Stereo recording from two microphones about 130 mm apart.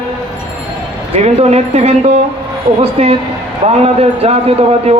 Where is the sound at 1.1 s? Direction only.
55° right (ahead or behind).